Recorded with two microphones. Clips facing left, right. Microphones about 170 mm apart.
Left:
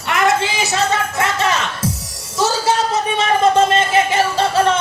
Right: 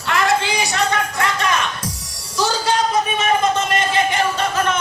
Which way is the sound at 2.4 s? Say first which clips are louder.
Left 2 dB; 25° left (ahead or behind).